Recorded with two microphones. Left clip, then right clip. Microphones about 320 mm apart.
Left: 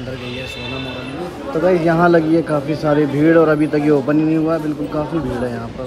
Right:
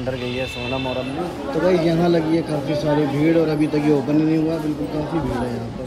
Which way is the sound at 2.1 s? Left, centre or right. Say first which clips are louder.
Left 5 dB; centre.